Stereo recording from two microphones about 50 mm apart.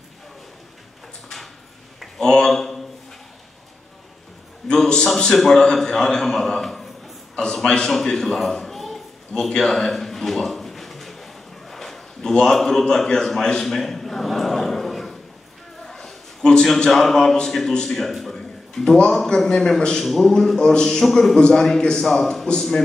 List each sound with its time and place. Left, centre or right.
1.3 s a sound: centre
4.6 s a man's voice: centre
9.5 s a sound: centre
16.6 s a man's voice: centre
21.0 s a man's voice: centre
21.4 s a man's voice: centre